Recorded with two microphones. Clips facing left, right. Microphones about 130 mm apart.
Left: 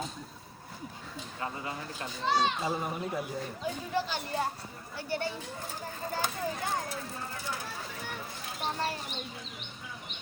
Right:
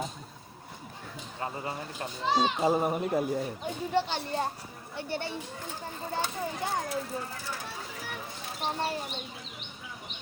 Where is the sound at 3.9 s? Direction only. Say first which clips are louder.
Right 5 dB; 30° right (ahead or behind).